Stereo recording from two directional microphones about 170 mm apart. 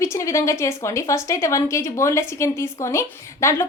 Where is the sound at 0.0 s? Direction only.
15° left (ahead or behind).